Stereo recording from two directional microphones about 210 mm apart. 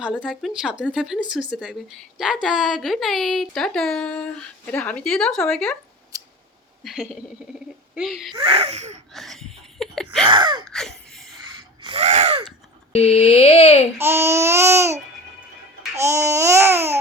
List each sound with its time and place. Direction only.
0.2 s a woman's voice: centre (ahead or behind)
6.8 s a woman's voice: centre (ahead or behind)
8.3 s speech: 25° right (ahead or behind)
9.1 s a sound: centre (ahead or behind)
10.2 s speech: 20° right (ahead or behind)
10.7 s a sound: centre (ahead or behind)
11.8 s gasp: 25° right (ahead or behind)
12.9 s speech: 30° left (ahead or behind)
14.0 s babbling: 10° right (ahead or behind)